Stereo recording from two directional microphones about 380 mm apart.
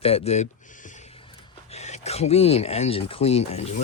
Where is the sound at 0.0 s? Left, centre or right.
Centre.